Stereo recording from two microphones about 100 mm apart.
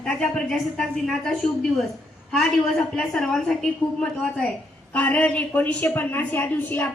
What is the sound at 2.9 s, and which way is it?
A man's voice, 10° left (ahead or behind).